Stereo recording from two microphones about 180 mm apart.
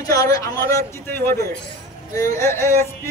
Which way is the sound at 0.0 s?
20° left (ahead or behind).